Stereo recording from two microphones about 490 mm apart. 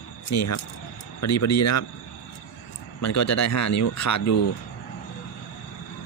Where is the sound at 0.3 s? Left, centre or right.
Left.